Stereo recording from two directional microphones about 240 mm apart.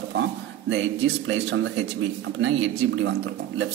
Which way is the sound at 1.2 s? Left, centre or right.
Right.